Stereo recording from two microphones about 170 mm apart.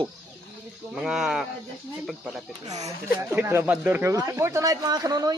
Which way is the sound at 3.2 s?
15° right (ahead or behind).